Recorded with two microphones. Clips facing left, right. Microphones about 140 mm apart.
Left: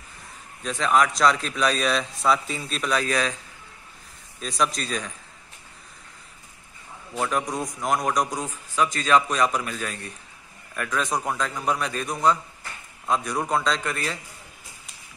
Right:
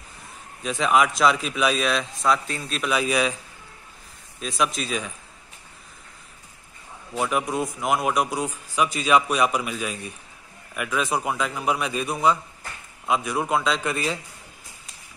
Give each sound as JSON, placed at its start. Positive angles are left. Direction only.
{"t": 0.7, "sound": "speech", "side_deg": -10}
{"t": 4.4, "sound": "speech", "side_deg": 0}
{"t": 7.2, "sound": "a man's voice", "side_deg": -10}
{"t": 13.9, "sound": "a man's voice", "side_deg": -15}